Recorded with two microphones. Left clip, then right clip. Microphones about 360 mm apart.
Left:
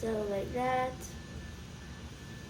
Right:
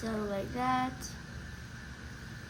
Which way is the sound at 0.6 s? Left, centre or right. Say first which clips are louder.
Even; centre.